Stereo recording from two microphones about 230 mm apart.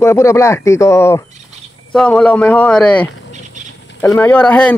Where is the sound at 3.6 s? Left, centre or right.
Right.